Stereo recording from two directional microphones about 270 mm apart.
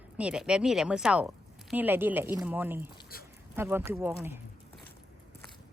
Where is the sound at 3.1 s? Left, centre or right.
Left.